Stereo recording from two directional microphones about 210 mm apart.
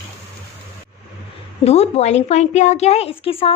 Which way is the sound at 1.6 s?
30° left (ahead or behind).